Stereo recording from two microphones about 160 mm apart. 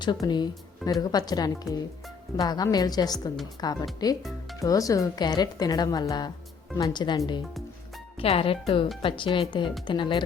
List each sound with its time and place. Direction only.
0.0 s speech: 25° left (ahead or behind)
8.2 s speech: 35° left (ahead or behind)